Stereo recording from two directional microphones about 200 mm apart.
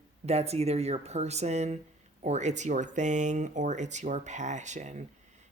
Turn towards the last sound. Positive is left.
turn(degrees=-35)  # may be behind; listen again after turning